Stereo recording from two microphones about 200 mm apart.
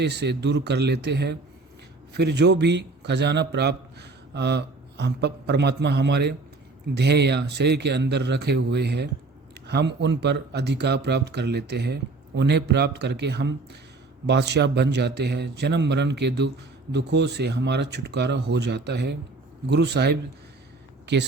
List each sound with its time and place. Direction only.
0.0 s speech: 55° right (ahead or behind)